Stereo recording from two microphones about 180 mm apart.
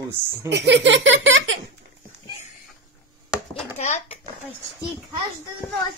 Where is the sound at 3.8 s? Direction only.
40° left (ahead or behind).